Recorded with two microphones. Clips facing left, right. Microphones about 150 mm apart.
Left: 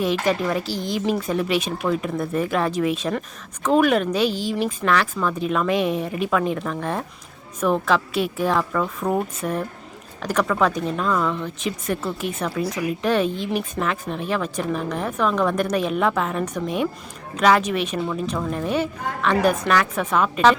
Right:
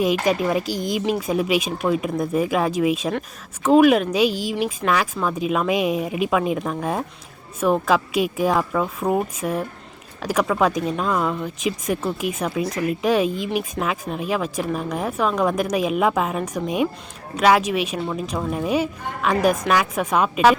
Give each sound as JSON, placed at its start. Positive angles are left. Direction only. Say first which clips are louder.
{"t": 0.0, "sound": "speech", "louder": "right 2 dB", "side_deg": -15}